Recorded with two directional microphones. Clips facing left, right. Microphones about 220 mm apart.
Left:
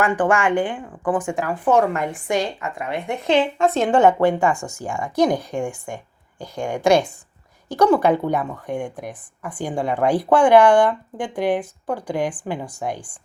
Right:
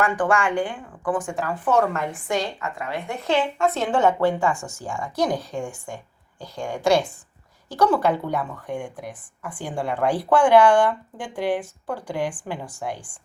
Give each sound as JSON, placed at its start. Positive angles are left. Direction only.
{"t": 0.0, "sound": "a woman's voice", "side_deg": 20}